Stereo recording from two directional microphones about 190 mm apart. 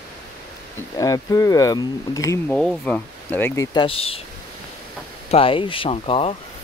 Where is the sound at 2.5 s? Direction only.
5° left (ahead or behind).